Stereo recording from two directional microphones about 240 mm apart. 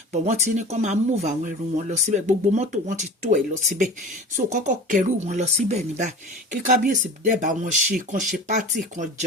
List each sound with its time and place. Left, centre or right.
0.1 s speech: right